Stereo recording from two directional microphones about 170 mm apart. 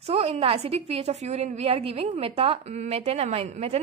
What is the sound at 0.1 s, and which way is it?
A woman's voice, 35° right (ahead or behind).